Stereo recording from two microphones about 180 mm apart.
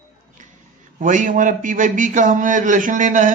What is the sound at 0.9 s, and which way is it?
A man's voice, 45° right (ahead or behind).